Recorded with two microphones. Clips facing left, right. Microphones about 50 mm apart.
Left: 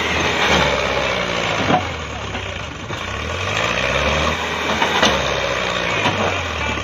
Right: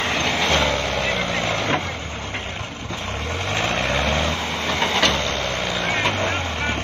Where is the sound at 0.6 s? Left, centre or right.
Left.